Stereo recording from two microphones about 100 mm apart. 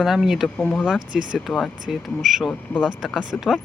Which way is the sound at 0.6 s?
10° left (ahead or behind).